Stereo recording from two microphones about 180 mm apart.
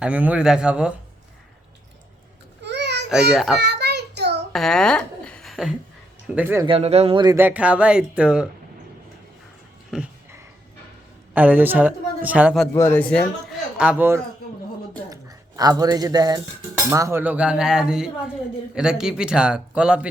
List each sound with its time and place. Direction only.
0.0 s a man's voice: 5° right (ahead or behind)
2.6 s babbling: 75° right (ahead or behind)
3.3 s a man's voice: 5° right (ahead or behind)
3.6 s child singing: 65° right (ahead or behind)
4.5 s a sound: 5° left (ahead or behind)
6.2 s a man's voice: 10° right (ahead or behind)
6.7 s speech: 35° right (ahead or behind)
7.3 s a man's voice: 10° right (ahead or behind)
9.9 s a man's voice: 5° right (ahead or behind)
11.3 s a man's voice: 10° right (ahead or behind)
12.7 s speech: 15° left (ahead or behind)
13.7 s a man's voice: 10° right (ahead or behind)
15.1 s a man's voice: 20° right (ahead or behind)